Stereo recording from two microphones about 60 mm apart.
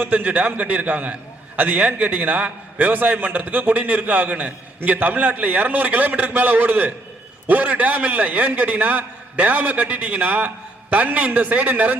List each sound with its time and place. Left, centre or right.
0.0 s a man's voice: right